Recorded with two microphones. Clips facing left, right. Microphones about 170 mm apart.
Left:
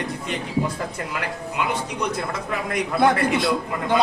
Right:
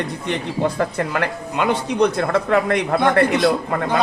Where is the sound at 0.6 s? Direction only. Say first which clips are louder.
Right 9 dB; 65° right (ahead or behind).